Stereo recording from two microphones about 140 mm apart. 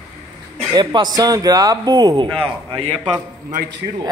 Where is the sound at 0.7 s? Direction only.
30° right (ahead or behind).